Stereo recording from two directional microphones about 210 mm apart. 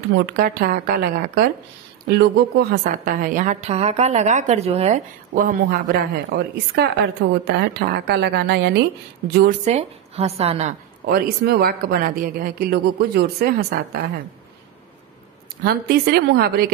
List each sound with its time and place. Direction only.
0.2 s a woman's voice: 45° right (ahead or behind)
9.7 s a woman's voice: 30° right (ahead or behind)
11.1 s speech: 45° right (ahead or behind)
15.6 s speech: 50° right (ahead or behind)